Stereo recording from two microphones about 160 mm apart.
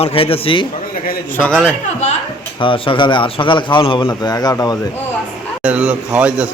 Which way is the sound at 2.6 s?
35° left (ahead or behind).